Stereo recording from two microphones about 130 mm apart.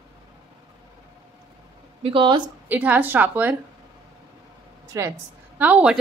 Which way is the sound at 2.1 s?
40° right (ahead or behind).